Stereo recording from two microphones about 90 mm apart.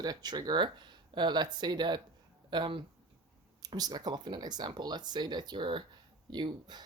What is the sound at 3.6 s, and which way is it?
Speech, 45° right (ahead or behind).